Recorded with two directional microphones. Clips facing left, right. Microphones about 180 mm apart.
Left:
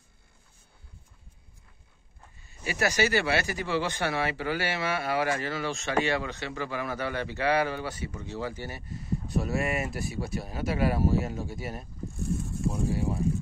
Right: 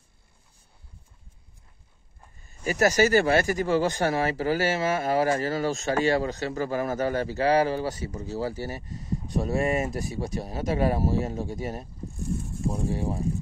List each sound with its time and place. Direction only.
2.4 s a man's voice: 45° right (ahead or behind)